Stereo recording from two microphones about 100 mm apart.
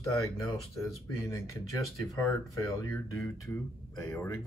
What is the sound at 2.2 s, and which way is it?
Speech, 30° left (ahead or behind).